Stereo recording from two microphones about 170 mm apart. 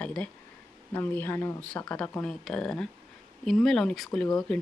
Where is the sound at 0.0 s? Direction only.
5° left (ahead or behind).